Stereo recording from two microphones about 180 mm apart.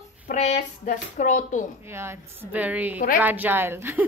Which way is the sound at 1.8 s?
15° right (ahead or behind).